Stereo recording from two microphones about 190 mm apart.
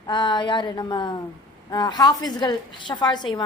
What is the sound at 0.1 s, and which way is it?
A woman's voice, 25° left (ahead or behind).